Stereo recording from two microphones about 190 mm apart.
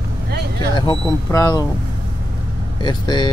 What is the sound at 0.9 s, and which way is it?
Speech, 15° left (ahead or behind).